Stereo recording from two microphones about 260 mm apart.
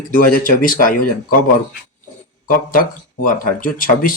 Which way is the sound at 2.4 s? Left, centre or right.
Left.